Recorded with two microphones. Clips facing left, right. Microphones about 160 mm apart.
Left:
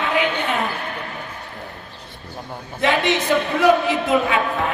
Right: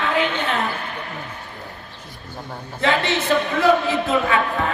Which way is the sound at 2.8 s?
20° left (ahead or behind).